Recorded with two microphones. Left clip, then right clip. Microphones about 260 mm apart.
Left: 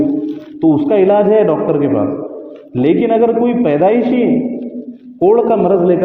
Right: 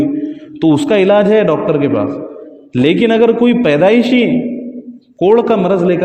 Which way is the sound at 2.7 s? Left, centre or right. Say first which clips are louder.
Right 1 dB; right.